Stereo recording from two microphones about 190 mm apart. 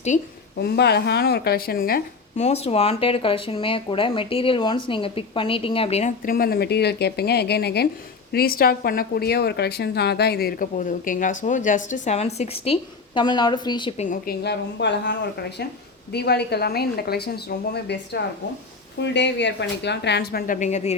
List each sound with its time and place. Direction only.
0.1 s a woman's voice: 40° left (ahead or behind)
0.6 s a woman's voice: 60° left (ahead or behind)
2.4 s a woman's voice: 35° left (ahead or behind)
14.0 s a woman's voice: 45° left (ahead or behind)
14.4 s a woman's voice: 65° left (ahead or behind)
20.5 s a woman's voice: 40° left (ahead or behind)